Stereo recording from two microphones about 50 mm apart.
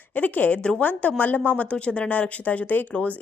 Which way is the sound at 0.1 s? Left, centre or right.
Left.